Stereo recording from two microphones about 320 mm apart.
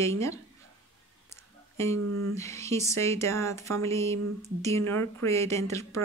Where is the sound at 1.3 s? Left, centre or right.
Centre.